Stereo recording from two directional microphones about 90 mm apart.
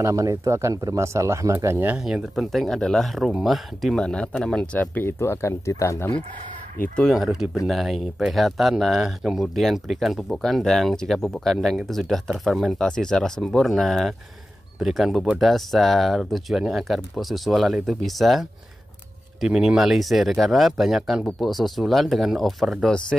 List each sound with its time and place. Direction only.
0.0 s speech: 35° right (ahead or behind)
1.9 s speech: 10° right (ahead or behind); by 4.6 s 5° left (ahead or behind)
4.7 s speech: 25° left (ahead or behind)
7.0 s speech: centre (ahead or behind)